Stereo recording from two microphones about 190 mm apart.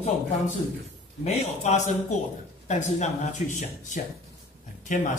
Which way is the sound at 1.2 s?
35° left (ahead or behind).